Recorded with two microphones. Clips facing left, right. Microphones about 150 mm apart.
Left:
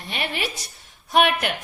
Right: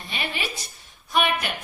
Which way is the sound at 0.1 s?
65° left (ahead or behind).